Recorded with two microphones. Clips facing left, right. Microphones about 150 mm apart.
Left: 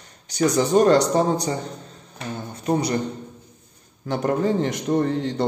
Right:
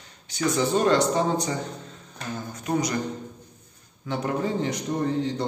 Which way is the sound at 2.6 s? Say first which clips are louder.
Left 4 dB; 30° left (ahead or behind).